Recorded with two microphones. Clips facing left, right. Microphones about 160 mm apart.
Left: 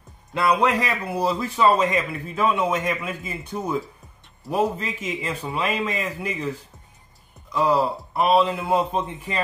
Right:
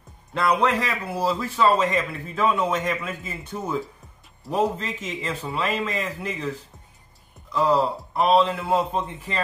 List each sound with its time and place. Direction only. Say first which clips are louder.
0.3 s a man's voice: left 1 dB; 10° left (ahead or behind)